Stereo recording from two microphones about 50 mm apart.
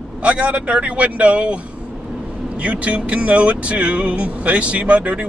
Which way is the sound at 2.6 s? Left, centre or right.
Right.